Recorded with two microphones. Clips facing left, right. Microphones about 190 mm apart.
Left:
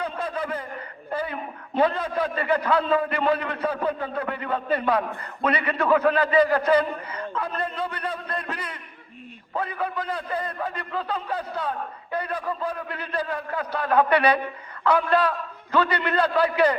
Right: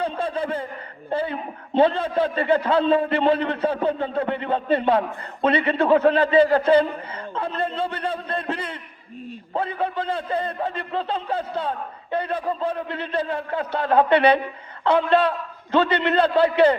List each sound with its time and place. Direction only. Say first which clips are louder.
0.0 s chuckle: right 4 dB; 30° right (ahead or behind)
1.1 s a man's voice: right 4 dB; 25° right (ahead or behind)